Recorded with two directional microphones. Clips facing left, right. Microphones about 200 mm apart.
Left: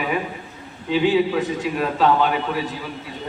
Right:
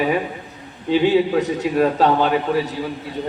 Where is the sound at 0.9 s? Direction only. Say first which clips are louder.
Right 2 dB; 40° right (ahead or behind).